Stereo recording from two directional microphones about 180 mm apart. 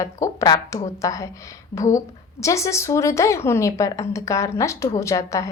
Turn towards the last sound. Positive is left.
turn(degrees=20)  # may be behind; listen again after turning